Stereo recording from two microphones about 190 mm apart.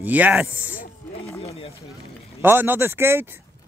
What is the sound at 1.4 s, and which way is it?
Speech, 30° left (ahead or behind).